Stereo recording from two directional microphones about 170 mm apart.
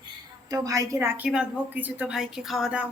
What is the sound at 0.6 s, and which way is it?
A woman's voice, 20° right (ahead or behind).